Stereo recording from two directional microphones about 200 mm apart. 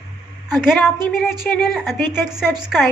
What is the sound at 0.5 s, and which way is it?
A woman's voice, centre (ahead or behind).